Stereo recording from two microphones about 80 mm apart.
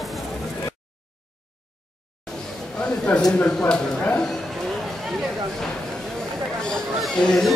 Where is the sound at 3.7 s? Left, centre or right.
Centre.